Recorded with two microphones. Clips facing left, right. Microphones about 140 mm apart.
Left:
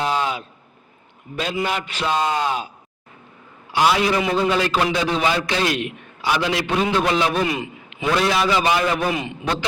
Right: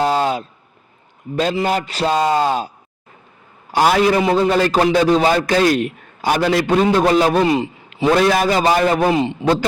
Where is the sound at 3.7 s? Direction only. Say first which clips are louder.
Right 4 dB; 45° right (ahead or behind).